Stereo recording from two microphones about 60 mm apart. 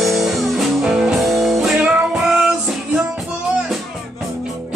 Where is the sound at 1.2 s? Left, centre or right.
Centre.